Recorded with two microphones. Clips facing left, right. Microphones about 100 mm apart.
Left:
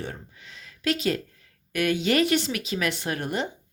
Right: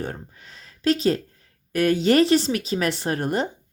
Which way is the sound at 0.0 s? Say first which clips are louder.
Right 4 dB; 40° right (ahead or behind).